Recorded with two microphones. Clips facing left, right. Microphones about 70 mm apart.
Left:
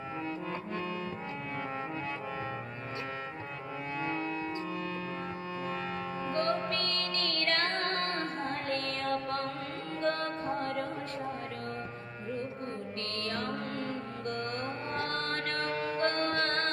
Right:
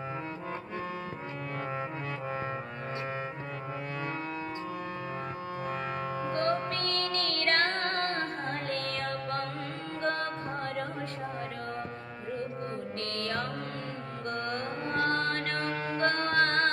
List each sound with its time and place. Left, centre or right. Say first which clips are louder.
6.3 s music: even; right
13.1 s music: right 2 dB; right
14.3 s mantra: right 2 dB; right